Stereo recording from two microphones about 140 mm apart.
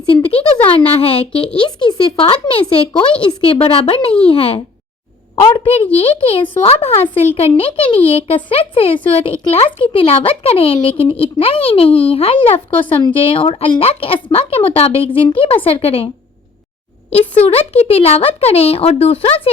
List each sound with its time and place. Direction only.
0.6 s speech: 45° left (ahead or behind)
17.1 s speech: 45° left (ahead or behind)